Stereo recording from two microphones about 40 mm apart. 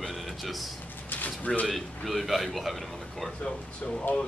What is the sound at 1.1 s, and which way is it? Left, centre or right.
Bird, left.